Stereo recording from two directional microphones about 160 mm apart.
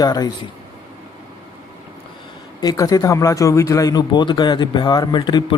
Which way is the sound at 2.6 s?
25° left (ahead or behind).